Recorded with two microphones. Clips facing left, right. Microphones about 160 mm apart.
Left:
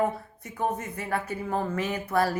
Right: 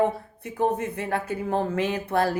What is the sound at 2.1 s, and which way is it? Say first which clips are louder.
Speech: right 1 dB; 30° right (ahead or behind).